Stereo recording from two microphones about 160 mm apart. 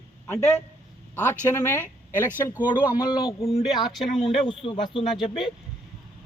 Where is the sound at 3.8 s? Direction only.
Centre (ahead or behind).